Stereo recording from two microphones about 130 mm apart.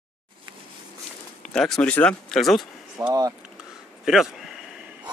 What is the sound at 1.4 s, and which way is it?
Speech, 5° left (ahead or behind).